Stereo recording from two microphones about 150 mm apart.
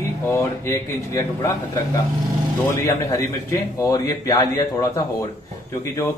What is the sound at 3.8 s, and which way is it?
A man's voice, 20° left (ahead or behind).